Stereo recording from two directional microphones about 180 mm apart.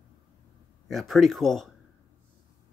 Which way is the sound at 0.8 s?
Centre (ahead or behind).